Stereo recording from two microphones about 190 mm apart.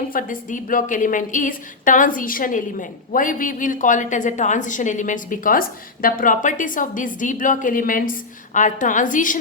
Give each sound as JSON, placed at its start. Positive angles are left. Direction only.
{"t": 0.1, "sound": "a woman's voice", "side_deg": 45}